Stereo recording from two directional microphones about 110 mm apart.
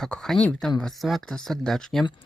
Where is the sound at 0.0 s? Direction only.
5° left (ahead or behind).